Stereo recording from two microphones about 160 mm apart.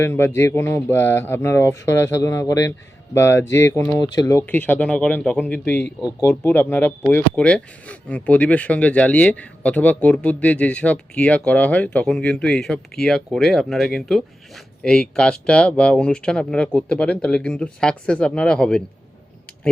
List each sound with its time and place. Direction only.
0.0 s speech: 15° left (ahead or behind)